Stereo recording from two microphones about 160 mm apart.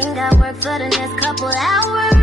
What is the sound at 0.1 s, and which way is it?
Music, centre (ahead or behind).